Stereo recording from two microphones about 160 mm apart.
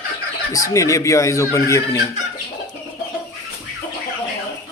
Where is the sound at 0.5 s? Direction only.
20° left (ahead or behind).